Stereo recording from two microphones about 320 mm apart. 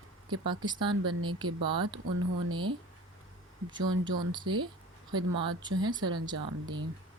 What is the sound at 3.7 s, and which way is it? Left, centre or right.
Speech, right.